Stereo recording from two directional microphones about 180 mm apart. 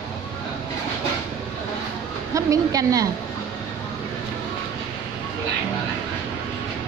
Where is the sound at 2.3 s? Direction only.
20° right (ahead or behind).